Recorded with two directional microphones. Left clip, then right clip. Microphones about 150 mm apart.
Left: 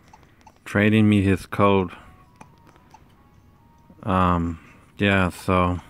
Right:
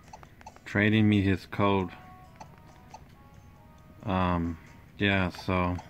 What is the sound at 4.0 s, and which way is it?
Speech, 35° left (ahead or behind).